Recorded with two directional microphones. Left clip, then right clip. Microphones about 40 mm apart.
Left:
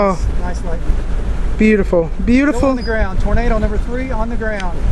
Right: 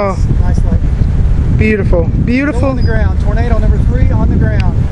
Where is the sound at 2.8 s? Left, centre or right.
Left.